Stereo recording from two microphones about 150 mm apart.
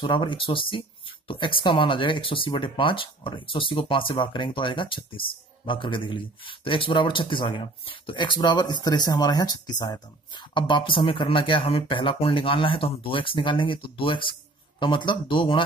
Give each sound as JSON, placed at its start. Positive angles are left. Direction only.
{"t": 0.0, "sound": "speech", "side_deg": 35}